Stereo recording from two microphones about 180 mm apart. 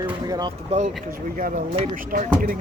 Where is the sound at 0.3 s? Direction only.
20° right (ahead or behind).